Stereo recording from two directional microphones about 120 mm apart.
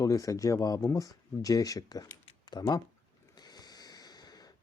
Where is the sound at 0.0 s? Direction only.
30° left (ahead or behind).